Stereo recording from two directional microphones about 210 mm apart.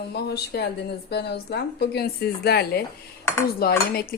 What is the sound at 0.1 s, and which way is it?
A woman's voice, 50° left (ahead or behind).